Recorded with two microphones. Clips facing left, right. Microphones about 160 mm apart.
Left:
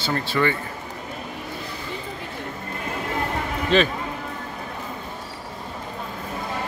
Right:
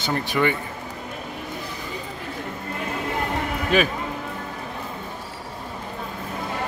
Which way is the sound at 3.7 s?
10° right (ahead or behind).